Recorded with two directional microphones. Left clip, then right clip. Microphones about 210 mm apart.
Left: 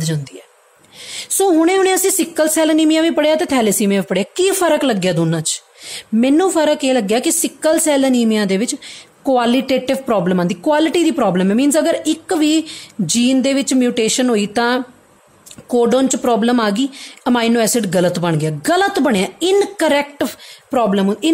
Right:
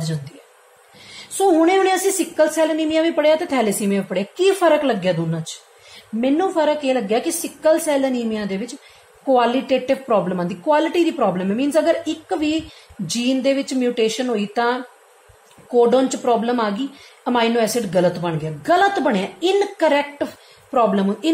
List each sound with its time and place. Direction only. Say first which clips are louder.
1.4 s speech: left 2 dB; 50° left (ahead or behind)